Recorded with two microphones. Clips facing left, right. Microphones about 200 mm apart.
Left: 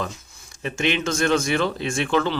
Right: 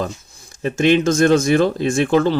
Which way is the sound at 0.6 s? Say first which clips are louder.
Right 9 dB; 40° right (ahead or behind).